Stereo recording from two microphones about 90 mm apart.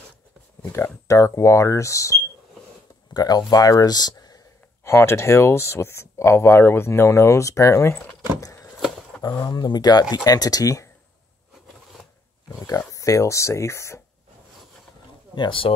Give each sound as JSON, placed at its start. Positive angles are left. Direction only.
{"t": 0.7, "sound": "speech", "side_deg": 30}
{"t": 3.1, "sound": "speech", "side_deg": 50}
{"t": 4.8, "sound": "speech", "side_deg": 30}
{"t": 7.9, "sound": "speech", "side_deg": 15}
{"t": 9.4, "sound": "speech", "side_deg": 50}
{"t": 12.5, "sound": "speech", "side_deg": 40}
{"t": 15.3, "sound": "speech", "side_deg": 70}